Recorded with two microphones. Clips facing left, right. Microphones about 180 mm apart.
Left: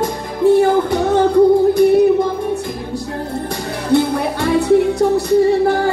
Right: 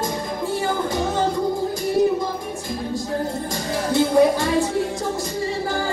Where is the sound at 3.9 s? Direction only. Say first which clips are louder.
Left 1 dB; 65° left (ahead or behind).